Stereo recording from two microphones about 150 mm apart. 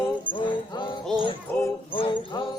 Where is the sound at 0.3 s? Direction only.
35° left (ahead or behind).